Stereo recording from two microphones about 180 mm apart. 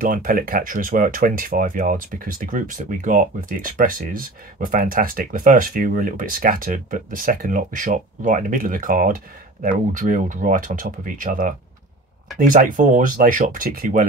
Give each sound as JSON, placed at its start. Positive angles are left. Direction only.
{"t": 0.0, "sound": "speech", "side_deg": -50}